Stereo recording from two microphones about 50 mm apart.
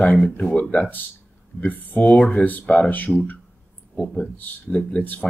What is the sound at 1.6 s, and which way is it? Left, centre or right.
Speech, left.